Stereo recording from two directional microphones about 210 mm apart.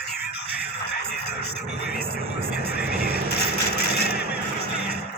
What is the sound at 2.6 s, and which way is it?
Vehicle, 50° left (ahead or behind).